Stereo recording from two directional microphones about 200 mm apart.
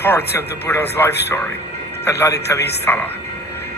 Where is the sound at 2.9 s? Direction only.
10° left (ahead or behind).